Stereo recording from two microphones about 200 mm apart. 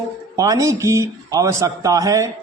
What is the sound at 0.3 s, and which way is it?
A man's voice, 15° right (ahead or behind).